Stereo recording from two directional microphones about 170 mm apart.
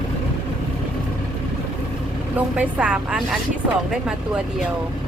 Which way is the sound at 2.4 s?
5° right (ahead or behind).